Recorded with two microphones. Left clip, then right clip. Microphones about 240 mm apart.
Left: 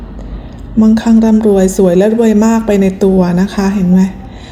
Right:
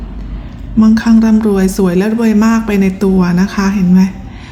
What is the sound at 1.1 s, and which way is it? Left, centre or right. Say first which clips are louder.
Speech: even; right.